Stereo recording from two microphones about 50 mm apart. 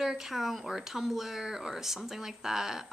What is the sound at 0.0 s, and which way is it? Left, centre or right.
Speech, centre.